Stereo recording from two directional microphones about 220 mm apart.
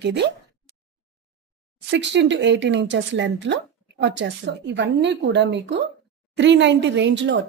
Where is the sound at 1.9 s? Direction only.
55° right (ahead or behind).